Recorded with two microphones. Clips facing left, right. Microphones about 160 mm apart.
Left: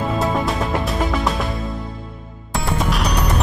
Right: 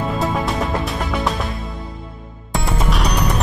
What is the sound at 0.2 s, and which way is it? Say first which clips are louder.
Music: even; centre (ahead or behind).